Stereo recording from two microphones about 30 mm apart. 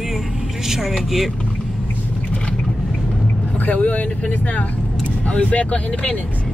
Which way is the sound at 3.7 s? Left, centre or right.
Left.